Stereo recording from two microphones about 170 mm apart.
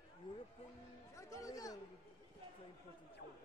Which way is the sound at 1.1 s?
20° left (ahead or behind).